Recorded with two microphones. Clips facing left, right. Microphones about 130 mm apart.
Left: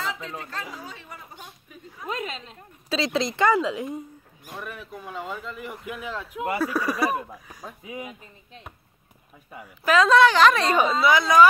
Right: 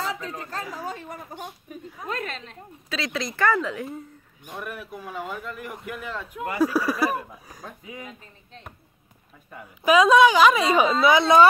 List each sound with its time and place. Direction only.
0.2 s speech: 30° left (ahead or behind)
0.5 s speech: 40° right (ahead or behind)
2.0 s a man's voice: 5° left (ahead or behind)
2.9 s speech: 25° left (ahead or behind)
4.6 s a man's voice: 5° right (ahead or behind)
7.8 s speech: 15° left (ahead or behind)
9.8 s a woman's voice: 15° right (ahead or behind)
11.1 s a woman's voice: 25° right (ahead or behind)